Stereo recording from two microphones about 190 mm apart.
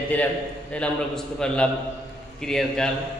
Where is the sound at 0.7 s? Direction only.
5° left (ahead or behind).